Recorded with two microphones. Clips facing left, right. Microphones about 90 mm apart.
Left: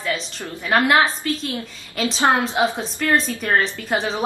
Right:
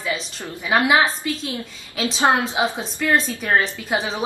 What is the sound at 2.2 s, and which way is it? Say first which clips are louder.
Speech: even; 15° right (ahead or behind).